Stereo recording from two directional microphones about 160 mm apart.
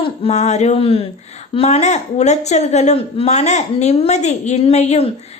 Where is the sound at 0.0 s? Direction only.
35° left (ahead or behind).